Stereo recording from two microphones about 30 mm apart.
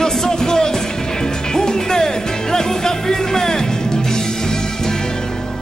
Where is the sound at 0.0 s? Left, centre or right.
Centre.